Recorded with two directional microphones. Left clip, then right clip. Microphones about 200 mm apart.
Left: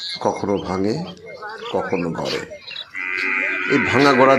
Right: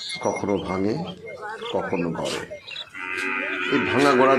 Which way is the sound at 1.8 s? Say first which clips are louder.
Left 3 dB; 30° left (ahead or behind).